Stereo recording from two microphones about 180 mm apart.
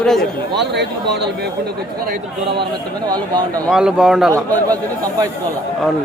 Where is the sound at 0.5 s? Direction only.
70° right (ahead or behind).